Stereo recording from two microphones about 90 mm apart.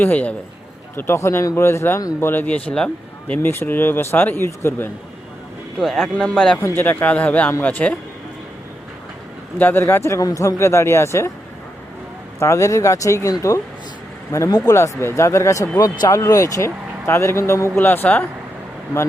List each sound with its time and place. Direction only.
0.0 s a man's voice: 15° left (ahead or behind)
0.9 s speech: 30° left (ahead or behind)
5.8 s a man's voice: 5° left (ahead or behind)
6.6 s a man's voice: 25° left (ahead or behind)
9.6 s speech: 20° left (ahead or behind)
12.4 s speech: 35° left (ahead or behind)
14.5 s speech: 45° left (ahead or behind)
14.8 s speech: 30° left (ahead or behind)